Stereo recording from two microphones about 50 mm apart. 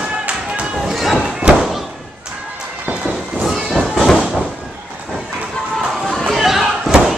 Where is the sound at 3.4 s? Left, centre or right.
Centre.